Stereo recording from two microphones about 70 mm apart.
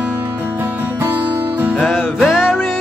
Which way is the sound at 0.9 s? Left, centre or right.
Right.